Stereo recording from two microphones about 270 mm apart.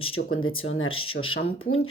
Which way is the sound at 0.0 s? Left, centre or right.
Left.